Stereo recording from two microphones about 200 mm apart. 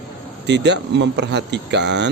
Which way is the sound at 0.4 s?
60° right (ahead or behind).